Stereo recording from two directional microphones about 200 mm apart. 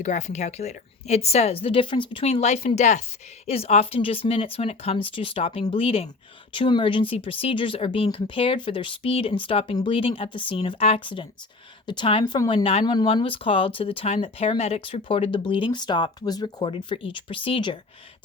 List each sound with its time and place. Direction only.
0.0 s a woman's voice: 35° left (ahead or behind)